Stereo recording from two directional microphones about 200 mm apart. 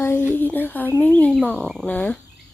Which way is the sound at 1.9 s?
5° left (ahead or behind).